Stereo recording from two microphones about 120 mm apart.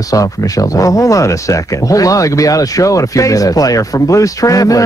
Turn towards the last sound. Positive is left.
turn(degrees=30)  # may be behind; listen again after turning